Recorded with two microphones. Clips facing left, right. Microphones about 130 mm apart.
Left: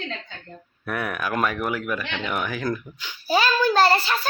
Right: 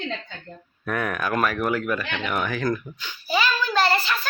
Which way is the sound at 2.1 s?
20° left (ahead or behind).